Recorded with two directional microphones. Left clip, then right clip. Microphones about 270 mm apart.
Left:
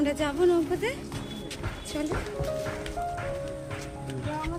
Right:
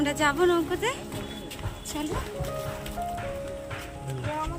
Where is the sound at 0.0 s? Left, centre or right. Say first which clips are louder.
Right 2 dB; centre.